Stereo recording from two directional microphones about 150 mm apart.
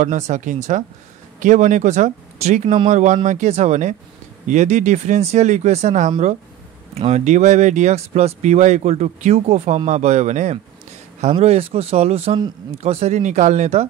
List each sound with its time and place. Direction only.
0.3 s speech: 55° right (ahead or behind)